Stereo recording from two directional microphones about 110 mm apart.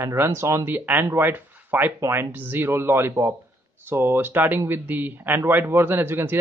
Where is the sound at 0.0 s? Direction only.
25° right (ahead or behind).